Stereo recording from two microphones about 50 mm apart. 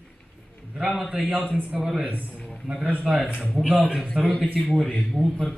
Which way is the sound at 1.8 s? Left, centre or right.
Centre.